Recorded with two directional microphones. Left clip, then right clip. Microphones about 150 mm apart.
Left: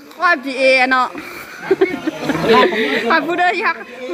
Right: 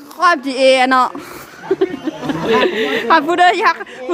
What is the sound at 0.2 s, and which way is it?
Speech, 30° right (ahead or behind).